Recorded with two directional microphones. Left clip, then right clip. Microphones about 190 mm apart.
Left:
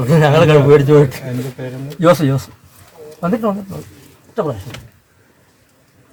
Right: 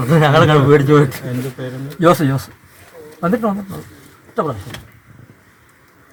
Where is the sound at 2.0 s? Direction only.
35° left (ahead or behind).